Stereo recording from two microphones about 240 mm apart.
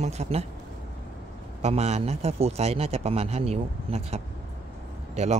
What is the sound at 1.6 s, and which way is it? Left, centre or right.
A man's voice, right.